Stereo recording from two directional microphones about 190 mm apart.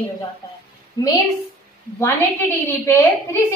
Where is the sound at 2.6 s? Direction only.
10° left (ahead or behind).